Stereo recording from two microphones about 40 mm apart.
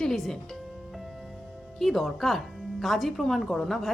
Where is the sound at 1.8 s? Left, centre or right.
Centre.